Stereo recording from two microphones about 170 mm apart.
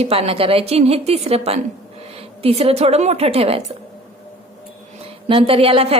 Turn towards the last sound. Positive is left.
turn(degrees=-35)  # may be behind; listen again after turning